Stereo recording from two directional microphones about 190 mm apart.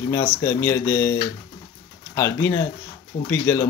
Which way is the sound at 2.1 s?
15° left (ahead or behind).